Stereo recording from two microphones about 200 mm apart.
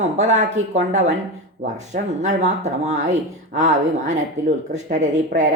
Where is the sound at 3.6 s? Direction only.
35° right (ahead or behind).